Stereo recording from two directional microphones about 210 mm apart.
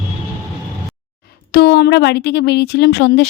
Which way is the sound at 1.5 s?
50° left (ahead or behind).